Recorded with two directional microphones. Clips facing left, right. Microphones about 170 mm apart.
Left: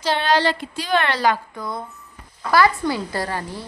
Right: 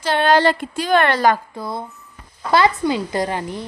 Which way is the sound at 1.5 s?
30° right (ahead or behind).